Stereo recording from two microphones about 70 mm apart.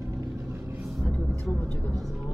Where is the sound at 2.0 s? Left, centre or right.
Centre.